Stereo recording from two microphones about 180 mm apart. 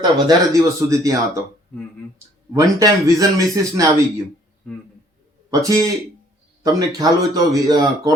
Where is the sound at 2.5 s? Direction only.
20° right (ahead or behind).